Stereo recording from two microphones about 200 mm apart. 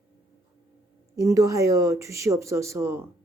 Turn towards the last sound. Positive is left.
turn(degrees=-15)  # may be behind; listen again after turning